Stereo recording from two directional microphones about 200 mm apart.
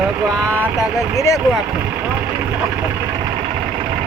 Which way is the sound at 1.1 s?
15° left (ahead or behind).